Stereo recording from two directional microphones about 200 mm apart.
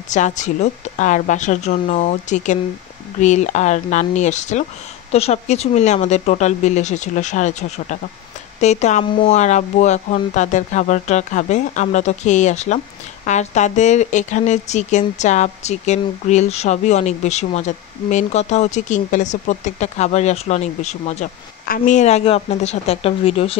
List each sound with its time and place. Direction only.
0.1 s speech: 35° left (ahead or behind)